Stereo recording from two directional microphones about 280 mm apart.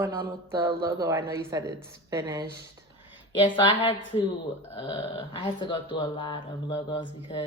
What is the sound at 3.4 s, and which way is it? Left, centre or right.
A woman's voice, centre.